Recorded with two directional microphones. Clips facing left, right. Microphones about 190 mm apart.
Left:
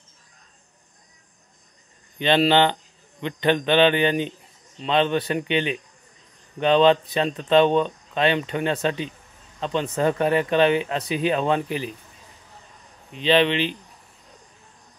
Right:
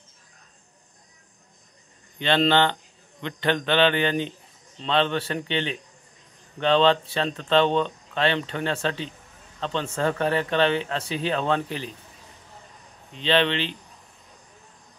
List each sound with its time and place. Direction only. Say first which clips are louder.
2.1 s a man's voice: left 2 dB; 15° left (ahead or behind)
13.1 s speech: left 3 dB; 15° left (ahead or behind)